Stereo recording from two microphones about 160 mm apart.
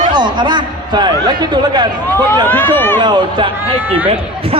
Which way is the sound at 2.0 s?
15° left (ahead or behind).